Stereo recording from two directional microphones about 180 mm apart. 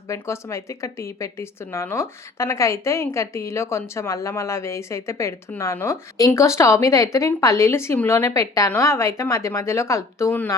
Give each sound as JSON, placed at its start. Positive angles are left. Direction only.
{"t": 0.1, "sound": "speech", "side_deg": 15}